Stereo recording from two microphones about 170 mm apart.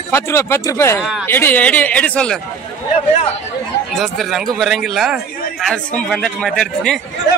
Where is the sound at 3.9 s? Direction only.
Centre (ahead or behind).